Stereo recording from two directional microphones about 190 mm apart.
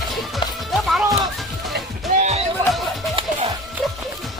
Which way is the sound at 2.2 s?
35° right (ahead or behind).